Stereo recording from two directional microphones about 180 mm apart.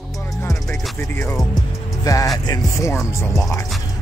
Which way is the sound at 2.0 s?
20° left (ahead or behind).